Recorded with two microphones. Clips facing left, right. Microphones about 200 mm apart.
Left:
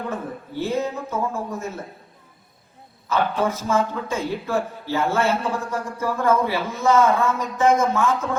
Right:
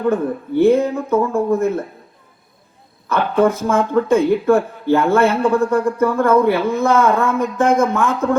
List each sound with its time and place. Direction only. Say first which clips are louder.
0.0 s speech: right 11 dB; 55° right (ahead or behind)
3.1 s speech: right 7 dB; 55° right (ahead or behind)